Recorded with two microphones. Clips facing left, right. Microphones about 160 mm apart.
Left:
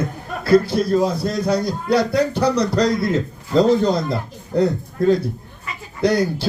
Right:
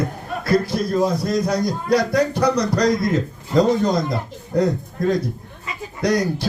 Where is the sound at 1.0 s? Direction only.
30° left (ahead or behind).